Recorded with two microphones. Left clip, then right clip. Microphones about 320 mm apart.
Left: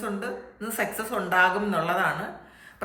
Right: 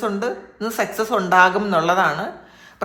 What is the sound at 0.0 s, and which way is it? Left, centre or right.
Speech, centre.